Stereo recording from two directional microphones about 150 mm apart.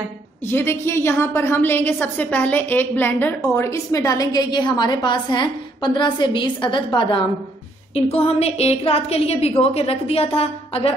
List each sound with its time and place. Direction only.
0.5 s a woman's voice: 15° left (ahead or behind); by 11.0 s 40° left (ahead or behind)